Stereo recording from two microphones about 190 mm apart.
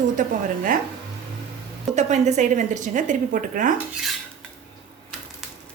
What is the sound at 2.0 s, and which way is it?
A woman's voice, 40° right (ahead or behind).